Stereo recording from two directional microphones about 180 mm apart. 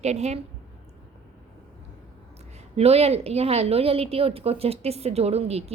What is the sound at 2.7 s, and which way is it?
A woman's voice, 35° right (ahead or behind).